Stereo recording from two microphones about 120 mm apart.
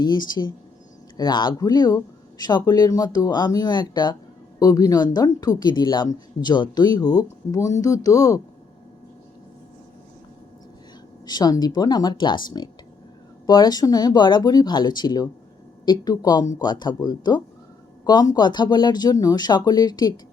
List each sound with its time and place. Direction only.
0.0 s speech: 35° left (ahead or behind)
11.3 s speech: 35° left (ahead or behind)